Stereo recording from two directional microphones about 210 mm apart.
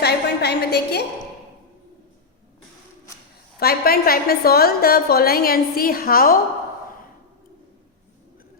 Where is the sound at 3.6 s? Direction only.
45° left (ahead or behind).